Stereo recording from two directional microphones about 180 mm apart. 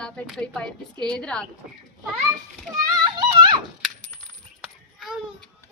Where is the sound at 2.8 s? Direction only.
20° right (ahead or behind).